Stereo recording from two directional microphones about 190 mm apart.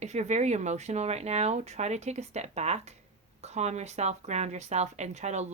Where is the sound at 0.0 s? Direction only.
35° right (ahead or behind).